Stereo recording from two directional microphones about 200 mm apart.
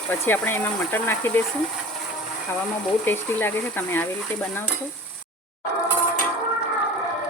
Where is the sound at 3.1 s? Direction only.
10° left (ahead or behind).